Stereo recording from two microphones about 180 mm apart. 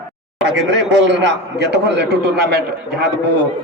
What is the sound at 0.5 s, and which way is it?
A man's voice, 80° right.